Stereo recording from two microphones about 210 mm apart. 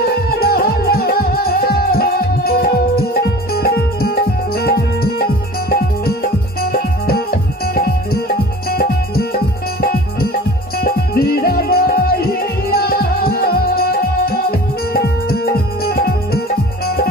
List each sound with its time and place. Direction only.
0.4 s music: 45° left (ahead or behind)